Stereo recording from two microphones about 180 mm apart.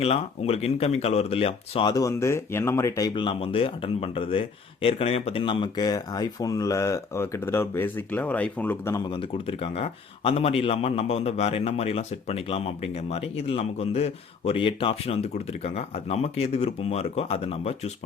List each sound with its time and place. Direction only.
0.0 s a man's voice: 35° left (ahead or behind); by 3.1 s 15° left (ahead or behind)
3.1 s speech: 30° left (ahead or behind); by 9.0 s 10° left (ahead or behind)
9.1 s a man's voice: 30° left (ahead or behind)